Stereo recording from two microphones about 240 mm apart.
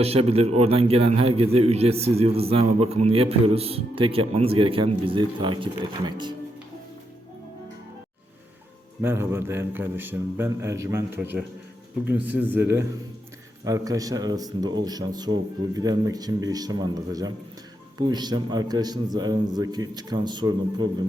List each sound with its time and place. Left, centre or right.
0.0 s a man's voice: right
9.0 s speech: centre
13.7 s speech: centre